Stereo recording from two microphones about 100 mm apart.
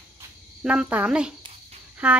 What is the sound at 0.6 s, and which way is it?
A woman's voice, 10° right (ahead or behind).